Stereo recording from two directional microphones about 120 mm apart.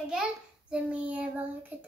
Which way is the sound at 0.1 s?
5° right (ahead or behind).